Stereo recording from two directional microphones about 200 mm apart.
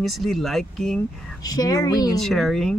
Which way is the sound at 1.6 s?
20° left (ahead or behind).